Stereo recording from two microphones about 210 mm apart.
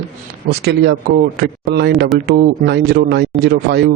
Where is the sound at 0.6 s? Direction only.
50° right (ahead or behind).